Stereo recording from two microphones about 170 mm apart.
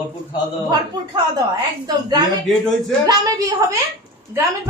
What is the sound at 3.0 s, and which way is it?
Speech, 20° right (ahead or behind).